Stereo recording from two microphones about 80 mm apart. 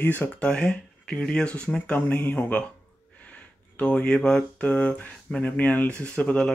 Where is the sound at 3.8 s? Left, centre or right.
Centre.